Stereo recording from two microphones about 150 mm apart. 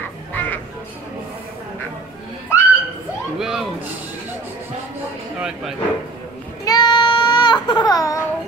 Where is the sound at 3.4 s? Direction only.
Centre (ahead or behind).